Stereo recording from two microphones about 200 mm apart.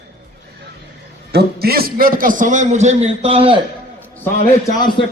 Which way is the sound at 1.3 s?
50° right (ahead or behind).